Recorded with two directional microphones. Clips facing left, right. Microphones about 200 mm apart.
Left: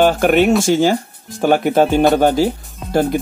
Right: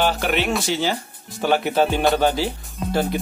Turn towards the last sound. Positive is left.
turn(degrees=50)  # may be behind; listen again after turning